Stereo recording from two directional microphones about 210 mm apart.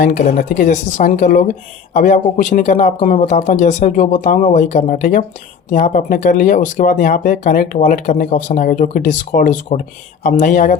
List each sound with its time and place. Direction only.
0.0 s speech: 40° left (ahead or behind)